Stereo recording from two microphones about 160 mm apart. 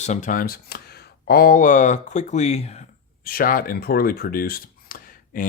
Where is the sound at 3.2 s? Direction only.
65° left (ahead or behind).